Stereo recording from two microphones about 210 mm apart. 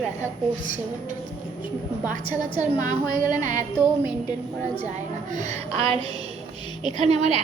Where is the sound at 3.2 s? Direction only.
35° right (ahead or behind).